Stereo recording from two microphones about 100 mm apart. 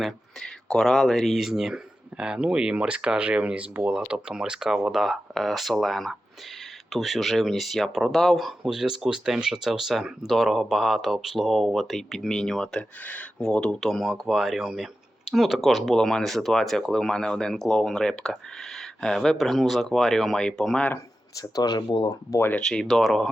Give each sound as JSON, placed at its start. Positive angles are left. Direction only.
{"t": 0.0, "sound": "speech", "side_deg": 5}
{"t": 21.3, "sound": "speech", "side_deg": 35}
{"t": 22.3, "sound": "speech", "side_deg": 25}
{"t": 22.5, "sound": "speech", "side_deg": 5}